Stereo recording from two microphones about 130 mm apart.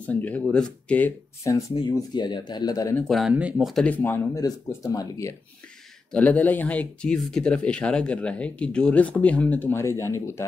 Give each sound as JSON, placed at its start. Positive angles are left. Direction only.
{"t": 0.0, "sound": "speech", "side_deg": 10}
{"t": 1.4, "sound": "speech", "side_deg": 25}
{"t": 3.0, "sound": "speech", "side_deg": 0}
{"t": 3.8, "sound": "speech", "side_deg": 15}
{"t": 4.3, "sound": "speech", "side_deg": 30}
{"t": 6.1, "sound": "speech", "side_deg": 10}